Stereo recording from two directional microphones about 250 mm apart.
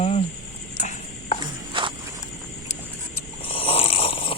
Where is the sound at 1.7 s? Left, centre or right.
Centre.